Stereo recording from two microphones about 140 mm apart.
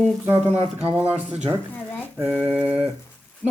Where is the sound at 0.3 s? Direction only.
45° right (ahead or behind).